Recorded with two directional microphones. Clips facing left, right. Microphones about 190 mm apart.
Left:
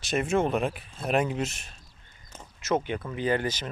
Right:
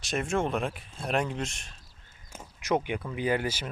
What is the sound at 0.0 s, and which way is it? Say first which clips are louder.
Speech: left 3 dB; centre (ahead or behind).